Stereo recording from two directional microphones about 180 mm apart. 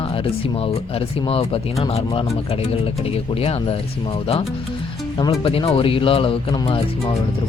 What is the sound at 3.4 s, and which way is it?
Speech, 35° left (ahead or behind).